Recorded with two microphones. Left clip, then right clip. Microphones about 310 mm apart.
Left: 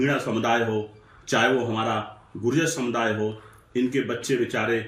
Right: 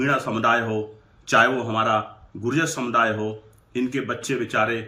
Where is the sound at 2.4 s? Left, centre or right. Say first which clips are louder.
Even; centre.